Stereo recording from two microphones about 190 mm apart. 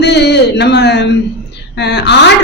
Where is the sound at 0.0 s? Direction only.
60° left (ahead or behind).